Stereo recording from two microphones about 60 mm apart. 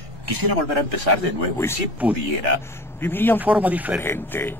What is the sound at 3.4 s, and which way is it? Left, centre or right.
Speech, right.